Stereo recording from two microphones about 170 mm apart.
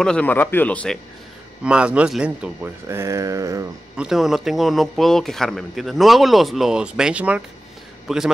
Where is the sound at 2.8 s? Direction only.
15° right (ahead or behind).